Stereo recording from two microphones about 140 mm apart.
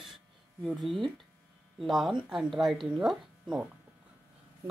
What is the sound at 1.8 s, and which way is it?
Speech, centre (ahead or behind).